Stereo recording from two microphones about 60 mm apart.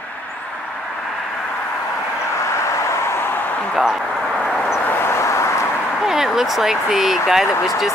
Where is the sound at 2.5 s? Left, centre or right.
Left.